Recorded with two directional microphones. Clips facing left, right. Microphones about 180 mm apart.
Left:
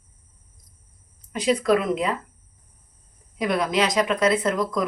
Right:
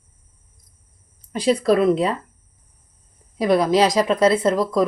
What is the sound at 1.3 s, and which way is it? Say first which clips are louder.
Speech: right 3 dB; 35° right (ahead or behind).